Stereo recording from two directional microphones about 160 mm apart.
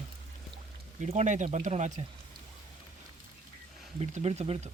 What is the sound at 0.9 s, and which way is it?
Speech, 45° right (ahead or behind).